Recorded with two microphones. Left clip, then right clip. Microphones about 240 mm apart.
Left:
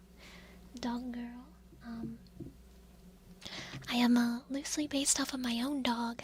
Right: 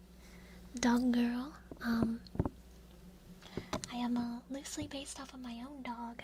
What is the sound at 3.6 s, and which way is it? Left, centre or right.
A woman's voice, left.